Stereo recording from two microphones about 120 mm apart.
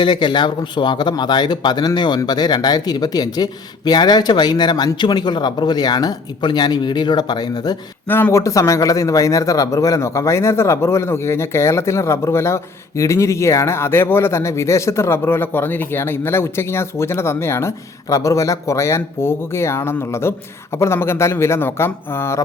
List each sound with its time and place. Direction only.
0.0 s speech: 40° left (ahead or behind)
8.0 s a man's voice: 15° left (ahead or behind)